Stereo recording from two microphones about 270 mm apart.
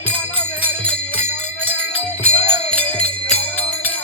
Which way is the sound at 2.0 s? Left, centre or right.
Centre.